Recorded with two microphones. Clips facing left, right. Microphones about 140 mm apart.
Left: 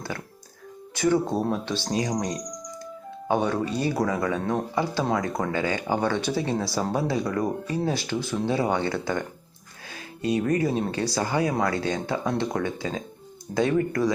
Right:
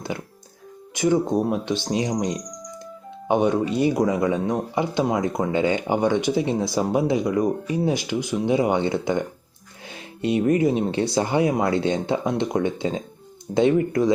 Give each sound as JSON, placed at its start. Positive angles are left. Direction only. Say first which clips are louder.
{"t": 0.1, "sound": "speech", "louder": "right 4 dB", "side_deg": -20}